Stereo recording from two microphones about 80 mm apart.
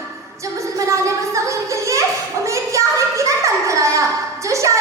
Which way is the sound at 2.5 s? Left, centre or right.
Right.